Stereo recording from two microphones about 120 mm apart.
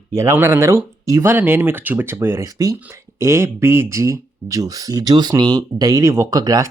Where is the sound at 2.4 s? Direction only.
30° right (ahead or behind).